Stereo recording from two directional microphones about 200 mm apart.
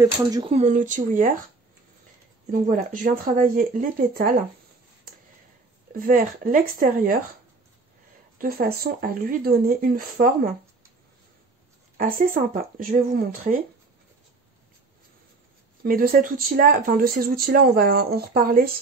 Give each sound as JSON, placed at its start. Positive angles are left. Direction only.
{"t": 0.0, "sound": "speech", "side_deg": -20}
{"t": 0.6, "sound": "speech", "side_deg": -40}
{"t": 2.5, "sound": "speech", "side_deg": -40}
{"t": 5.9, "sound": "speech", "side_deg": -45}
{"t": 8.4, "sound": "speech", "side_deg": -50}
{"t": 12.0, "sound": "speech", "side_deg": -45}
{"t": 15.8, "sound": "speech", "side_deg": -45}